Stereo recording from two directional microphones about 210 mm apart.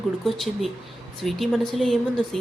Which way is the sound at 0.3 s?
Centre (ahead or behind).